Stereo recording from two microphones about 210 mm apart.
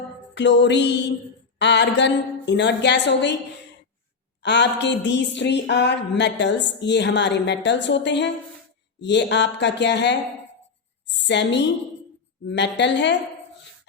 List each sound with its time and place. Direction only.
0.3 s speech: 55° left (ahead or behind)
4.4 s a woman's voice: 55° left (ahead or behind)